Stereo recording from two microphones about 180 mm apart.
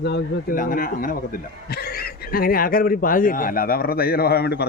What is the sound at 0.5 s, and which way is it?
Speech, 50° left (ahead or behind).